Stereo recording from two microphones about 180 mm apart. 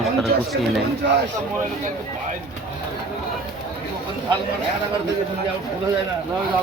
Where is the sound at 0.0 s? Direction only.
Centre (ahead or behind).